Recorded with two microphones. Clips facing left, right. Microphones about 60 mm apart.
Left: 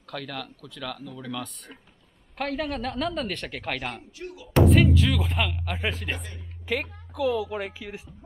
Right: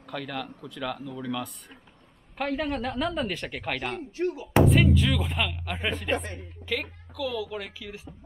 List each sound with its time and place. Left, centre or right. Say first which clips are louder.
0.0 s speech: right 1 dB; centre
4.2 s speech: right 10 dB; right
4.6 s speech: left 1 dB; centre
6.1 s a woman's voice: right 9 dB; right
6.6 s a woman's voice: left 3 dB; centre